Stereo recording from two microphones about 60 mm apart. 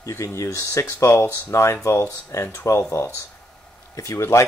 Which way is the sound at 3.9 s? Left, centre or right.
Left.